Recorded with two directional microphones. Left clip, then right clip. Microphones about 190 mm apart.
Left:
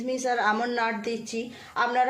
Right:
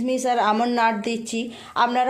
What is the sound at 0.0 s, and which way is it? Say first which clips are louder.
Speech: right 5 dB; 35° right (ahead or behind).